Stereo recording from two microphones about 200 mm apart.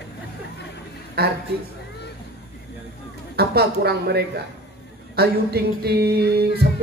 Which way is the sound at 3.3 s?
50° right (ahead or behind).